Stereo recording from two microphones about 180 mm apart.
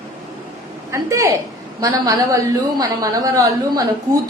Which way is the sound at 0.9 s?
15° right (ahead or behind).